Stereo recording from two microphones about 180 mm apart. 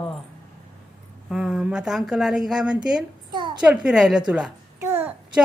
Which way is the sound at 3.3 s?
25° right (ahead or behind).